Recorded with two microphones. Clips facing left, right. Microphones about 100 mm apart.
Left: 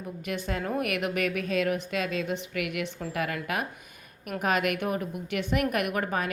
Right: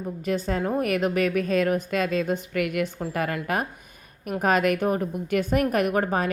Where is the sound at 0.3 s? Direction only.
35° right (ahead or behind).